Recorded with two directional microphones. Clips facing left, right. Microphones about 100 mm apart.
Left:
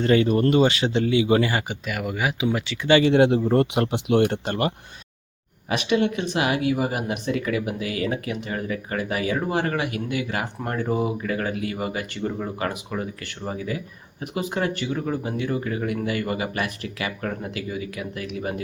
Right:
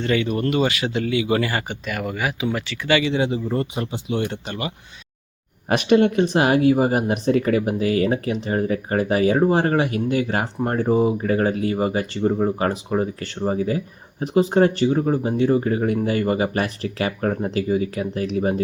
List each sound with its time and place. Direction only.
0.0 s speech: 35° left (ahead or behind); by 2.9 s 15° left (ahead or behind)
3.0 s speech: 60° left (ahead or behind)
5.6 s speech: 45° right (ahead or behind)